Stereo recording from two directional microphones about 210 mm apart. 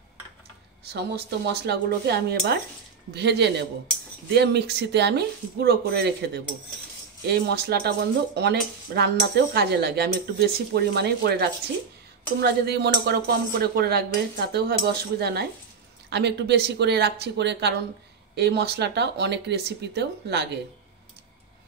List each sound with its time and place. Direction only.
0.9 s speech: 50° right (ahead or behind)